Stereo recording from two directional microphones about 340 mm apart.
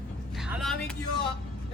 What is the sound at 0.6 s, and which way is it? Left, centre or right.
Vehicle, centre.